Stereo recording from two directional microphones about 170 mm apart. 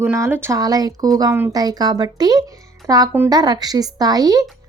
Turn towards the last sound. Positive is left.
turn(degrees=-20)  # may be behind; listen again after turning